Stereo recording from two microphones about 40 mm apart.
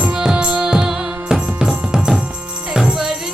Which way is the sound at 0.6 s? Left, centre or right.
Centre.